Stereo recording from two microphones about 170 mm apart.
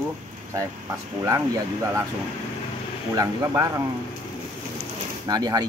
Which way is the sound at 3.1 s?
20° right (ahead or behind).